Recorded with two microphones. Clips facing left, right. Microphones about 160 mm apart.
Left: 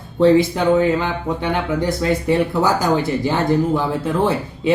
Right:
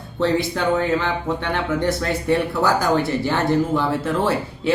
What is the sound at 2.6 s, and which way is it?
Speech, 15° left (ahead or behind).